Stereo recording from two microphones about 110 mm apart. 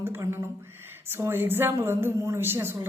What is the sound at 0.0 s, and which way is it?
Speech, 20° right (ahead or behind).